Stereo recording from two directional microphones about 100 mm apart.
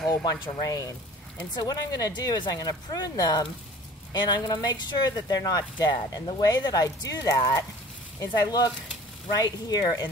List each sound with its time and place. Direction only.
0.2 s speech: 40° left (ahead or behind)